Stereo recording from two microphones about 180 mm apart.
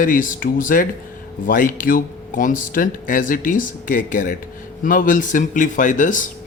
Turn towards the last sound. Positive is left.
turn(degrees=45)  # may be behind; listen again after turning